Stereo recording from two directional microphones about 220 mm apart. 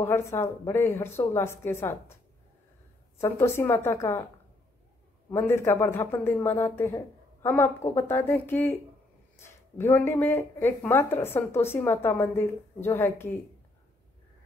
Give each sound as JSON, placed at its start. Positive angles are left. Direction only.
{"t": 0.0, "sound": "speech", "side_deg": 10}
{"t": 3.2, "sound": "speech", "side_deg": 10}
{"t": 5.3, "sound": "speech", "side_deg": 10}